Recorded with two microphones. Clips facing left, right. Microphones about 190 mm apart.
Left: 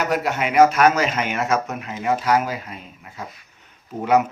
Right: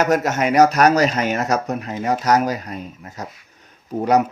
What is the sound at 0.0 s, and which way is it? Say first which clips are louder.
Speech: right 4 dB; 45° right (ahead or behind).